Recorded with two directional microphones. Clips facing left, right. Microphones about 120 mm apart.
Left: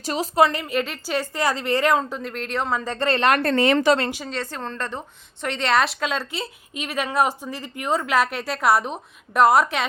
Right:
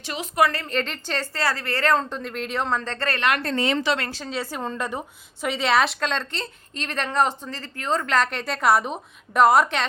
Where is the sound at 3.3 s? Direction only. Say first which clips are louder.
Left 5 dB; 60° left (ahead or behind).